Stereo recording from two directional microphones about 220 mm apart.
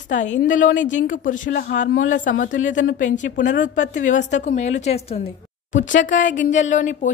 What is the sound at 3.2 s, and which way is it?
Speech, 55° left (ahead or behind).